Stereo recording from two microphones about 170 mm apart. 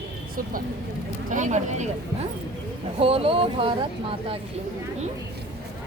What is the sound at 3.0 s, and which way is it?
Speech, 35° right (ahead or behind).